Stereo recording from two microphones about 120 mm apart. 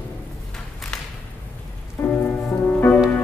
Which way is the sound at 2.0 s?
15° left (ahead or behind).